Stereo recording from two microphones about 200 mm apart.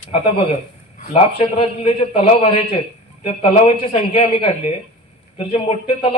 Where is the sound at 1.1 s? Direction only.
30° left (ahead or behind).